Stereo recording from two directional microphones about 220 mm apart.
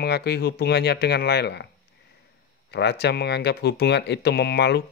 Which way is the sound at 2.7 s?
50° left (ahead or behind).